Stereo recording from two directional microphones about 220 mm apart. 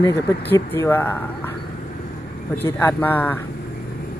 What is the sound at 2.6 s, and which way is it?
Speech, 10° left (ahead or behind).